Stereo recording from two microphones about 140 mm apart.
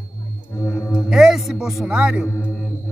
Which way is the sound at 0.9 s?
5° right (ahead or behind).